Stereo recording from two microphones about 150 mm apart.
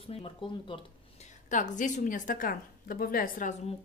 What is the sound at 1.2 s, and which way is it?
A woman's voice, 60° left (ahead or behind).